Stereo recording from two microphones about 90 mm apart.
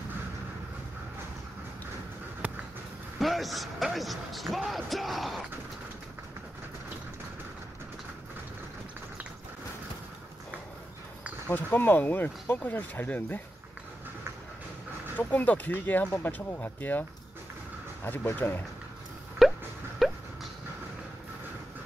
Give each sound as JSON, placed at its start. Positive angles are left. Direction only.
{"t": 2.4, "sound": "a sound", "side_deg": -15}
{"t": 3.2, "sound": "speech", "side_deg": 0}
{"t": 11.4, "sound": "speech", "side_deg": 20}
{"t": 15.1, "sound": "speech", "side_deg": 20}
{"t": 18.0, "sound": "speech", "side_deg": 20}
{"t": 19.4, "sound": "music", "side_deg": 0}
{"t": 20.0, "sound": "a sound", "side_deg": 0}